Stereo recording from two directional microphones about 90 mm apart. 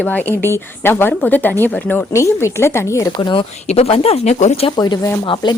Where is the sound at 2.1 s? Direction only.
35° left (ahead or behind).